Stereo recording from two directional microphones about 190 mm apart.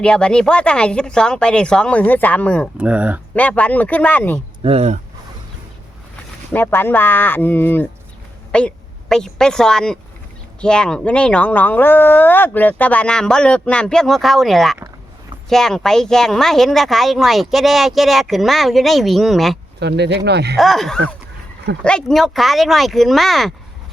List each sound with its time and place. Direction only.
0.0 s speech: 5° left (ahead or behind)
2.7 s speech: 5° right (ahead or behind)
3.3 s speech: 5° left (ahead or behind)
4.6 s speech: 35° right (ahead or behind)
6.5 s a woman's voice: 10° left (ahead or behind)
19.8 s speech: 60° right (ahead or behind)
20.6 s speech: centre (ahead or behind)